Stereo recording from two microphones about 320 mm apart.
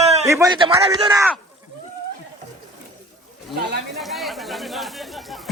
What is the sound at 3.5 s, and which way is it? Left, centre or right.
Speech, right.